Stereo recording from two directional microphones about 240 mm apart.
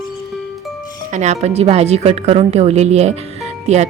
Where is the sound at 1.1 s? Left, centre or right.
Right.